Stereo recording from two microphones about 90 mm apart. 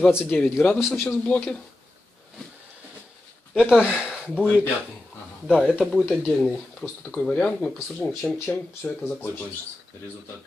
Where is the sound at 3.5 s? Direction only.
5° right (ahead or behind).